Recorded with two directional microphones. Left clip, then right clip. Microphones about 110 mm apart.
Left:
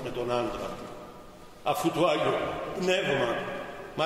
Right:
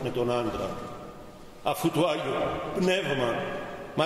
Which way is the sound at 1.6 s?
20° right (ahead or behind).